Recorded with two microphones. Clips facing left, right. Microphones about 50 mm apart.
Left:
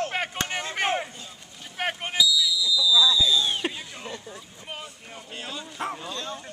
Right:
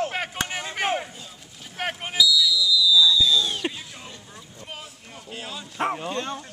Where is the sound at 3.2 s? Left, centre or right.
Centre.